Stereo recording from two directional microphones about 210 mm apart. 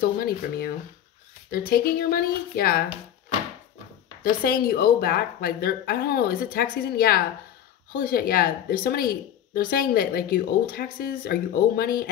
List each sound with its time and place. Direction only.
0.0 s speech: 45° left (ahead or behind)
4.2 s speech: 45° left (ahead or behind)